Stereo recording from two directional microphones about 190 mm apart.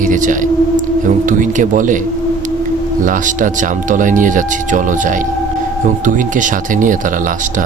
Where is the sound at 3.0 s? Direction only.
45° right (ahead or behind).